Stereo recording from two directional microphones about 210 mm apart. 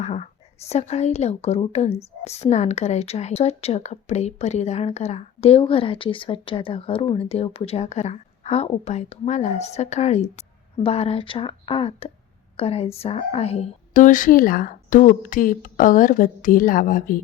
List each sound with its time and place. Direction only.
0.0 s speech: 30° left (ahead or behind)